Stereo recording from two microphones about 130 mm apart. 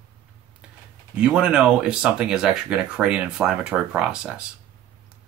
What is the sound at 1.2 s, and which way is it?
Speech, 5° right (ahead or behind).